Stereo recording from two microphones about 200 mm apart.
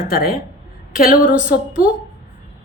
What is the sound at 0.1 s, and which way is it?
A woman's voice, 50° left (ahead or behind).